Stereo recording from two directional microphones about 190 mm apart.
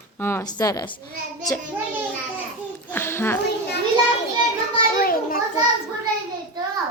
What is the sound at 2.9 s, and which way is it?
Speech, 15° left (ahead or behind).